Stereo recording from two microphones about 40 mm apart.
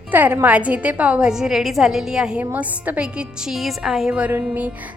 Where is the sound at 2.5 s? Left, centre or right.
Right.